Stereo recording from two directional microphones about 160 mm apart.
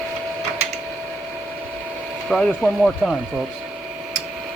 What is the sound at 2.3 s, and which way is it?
Speech, centre (ahead or behind).